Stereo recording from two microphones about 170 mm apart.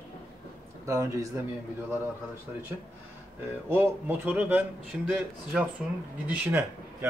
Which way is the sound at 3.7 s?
10° right (ahead or behind).